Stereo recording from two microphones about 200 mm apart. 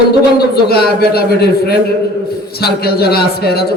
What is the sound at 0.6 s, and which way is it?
A man's voice, 50° left (ahead or behind).